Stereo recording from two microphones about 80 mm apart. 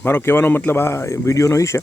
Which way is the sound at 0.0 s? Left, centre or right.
Left.